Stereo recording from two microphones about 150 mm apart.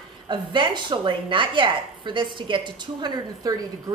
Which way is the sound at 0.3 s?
30° right (ahead or behind).